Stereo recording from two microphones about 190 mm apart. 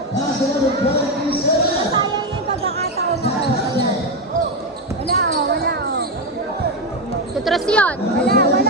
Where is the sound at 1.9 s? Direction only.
25° right (ahead or behind).